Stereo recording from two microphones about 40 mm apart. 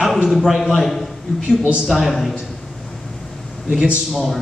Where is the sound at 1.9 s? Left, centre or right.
Centre.